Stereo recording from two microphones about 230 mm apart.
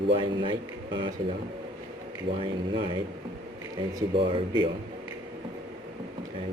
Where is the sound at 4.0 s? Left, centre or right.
Right.